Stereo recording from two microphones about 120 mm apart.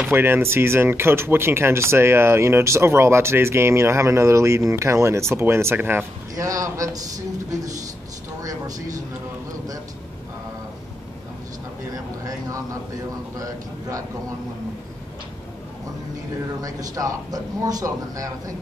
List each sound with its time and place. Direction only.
0.0 s speech: 15° right (ahead or behind)
6.3 s speech: 30° right (ahead or behind)
8.4 s vehicle: 30° right (ahead or behind)
11.9 s a sound: 30° right (ahead or behind)
16.6 s speech: 30° right (ahead or behind)